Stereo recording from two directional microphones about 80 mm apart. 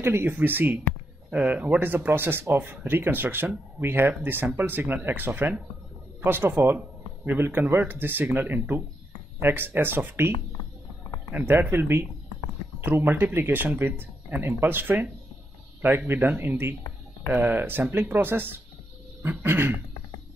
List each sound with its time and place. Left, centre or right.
0.0 s a man's voice: right
10.3 s a sound: left
11.3 s speech: right